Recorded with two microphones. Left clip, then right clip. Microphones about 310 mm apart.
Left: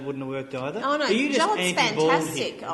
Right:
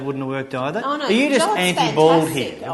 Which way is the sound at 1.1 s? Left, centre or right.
Right.